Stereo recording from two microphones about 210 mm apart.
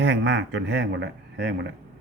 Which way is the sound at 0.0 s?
60° right (ahead or behind).